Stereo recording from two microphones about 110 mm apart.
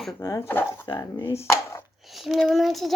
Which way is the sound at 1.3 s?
25° left (ahead or behind).